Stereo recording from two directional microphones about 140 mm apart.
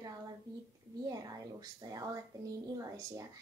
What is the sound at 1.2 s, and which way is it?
A woman's voice, 25° right (ahead or behind).